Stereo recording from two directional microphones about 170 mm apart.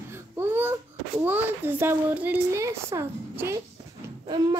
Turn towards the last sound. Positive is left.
turn(degrees=-25)  # may be behind; listen again after turning